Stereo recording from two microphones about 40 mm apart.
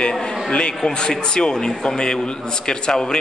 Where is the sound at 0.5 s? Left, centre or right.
Left.